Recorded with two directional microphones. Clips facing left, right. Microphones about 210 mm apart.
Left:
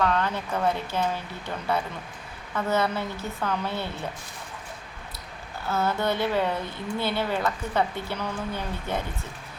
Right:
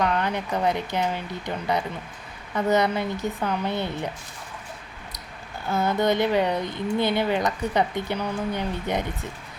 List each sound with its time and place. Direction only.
0.0 s speech: 15° right (ahead or behind)
5.6 s speech: 15° right (ahead or behind)